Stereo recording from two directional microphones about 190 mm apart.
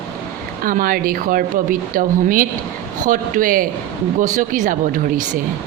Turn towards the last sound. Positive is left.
turn(degrees=-45)  # may be behind; listen again after turning